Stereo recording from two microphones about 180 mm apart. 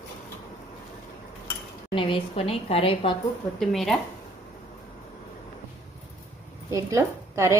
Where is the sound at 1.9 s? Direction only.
30° left (ahead or behind).